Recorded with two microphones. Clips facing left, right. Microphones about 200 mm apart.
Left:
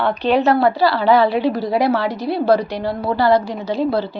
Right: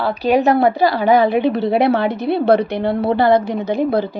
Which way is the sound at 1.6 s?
60° right (ahead or behind).